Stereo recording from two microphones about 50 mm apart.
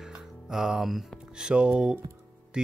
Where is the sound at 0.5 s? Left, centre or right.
Centre.